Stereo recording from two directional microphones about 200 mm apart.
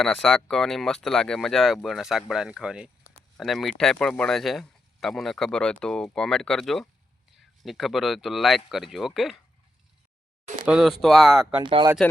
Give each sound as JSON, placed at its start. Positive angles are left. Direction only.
{"t": 0.0, "sound": "speech", "side_deg": 0}
{"t": 10.7, "sound": "speech", "side_deg": 0}
{"t": 11.6, "sound": "speech", "side_deg": -25}